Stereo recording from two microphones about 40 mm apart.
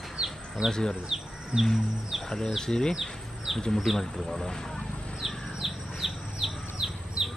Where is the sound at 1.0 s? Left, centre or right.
Centre.